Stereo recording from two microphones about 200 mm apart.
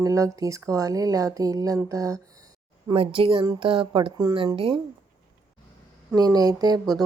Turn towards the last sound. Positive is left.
turn(degrees=-20)  # may be behind; listen again after turning